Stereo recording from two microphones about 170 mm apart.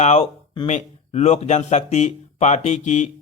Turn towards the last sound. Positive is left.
turn(degrees=45)  # may be behind; listen again after turning